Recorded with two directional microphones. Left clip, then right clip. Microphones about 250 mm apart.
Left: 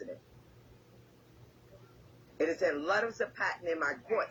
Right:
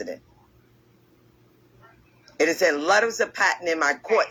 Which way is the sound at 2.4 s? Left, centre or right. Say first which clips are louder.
Right 10 dB; right.